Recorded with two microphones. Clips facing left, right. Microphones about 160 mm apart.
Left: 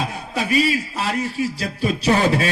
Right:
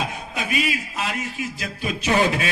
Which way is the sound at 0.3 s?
35° left (ahead or behind).